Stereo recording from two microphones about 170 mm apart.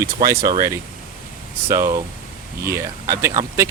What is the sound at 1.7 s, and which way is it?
Speech, 20° right (ahead or behind).